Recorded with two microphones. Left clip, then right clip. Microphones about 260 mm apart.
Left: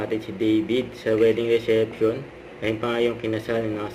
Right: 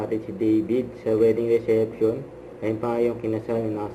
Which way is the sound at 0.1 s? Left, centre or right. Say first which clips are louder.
Even; centre.